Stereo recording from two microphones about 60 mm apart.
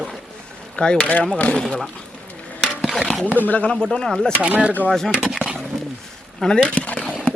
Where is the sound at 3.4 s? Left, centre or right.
Left.